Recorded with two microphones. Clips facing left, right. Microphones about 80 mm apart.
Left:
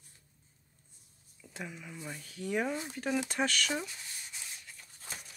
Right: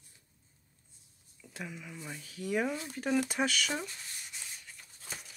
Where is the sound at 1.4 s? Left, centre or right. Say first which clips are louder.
Even; centre.